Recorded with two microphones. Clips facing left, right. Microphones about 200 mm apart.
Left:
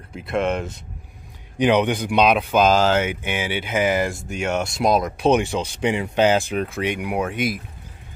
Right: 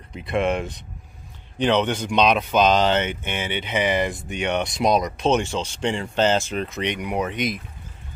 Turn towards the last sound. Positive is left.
turn(degrees=5)  # may be behind; listen again after turning